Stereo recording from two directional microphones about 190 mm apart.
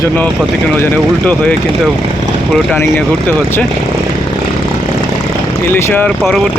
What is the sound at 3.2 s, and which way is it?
Speech, 10° left (ahead or behind).